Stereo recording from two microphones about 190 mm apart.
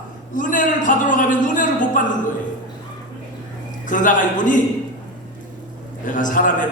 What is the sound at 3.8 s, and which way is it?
Speech, 45° left (ahead or behind).